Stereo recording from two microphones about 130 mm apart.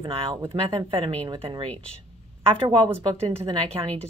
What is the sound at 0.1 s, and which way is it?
Speech, 45° right (ahead or behind).